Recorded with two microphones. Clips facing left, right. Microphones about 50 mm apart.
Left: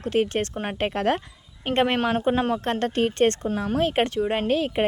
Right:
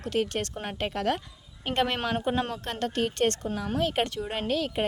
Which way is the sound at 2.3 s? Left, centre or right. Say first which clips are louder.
Left 7 dB; centre.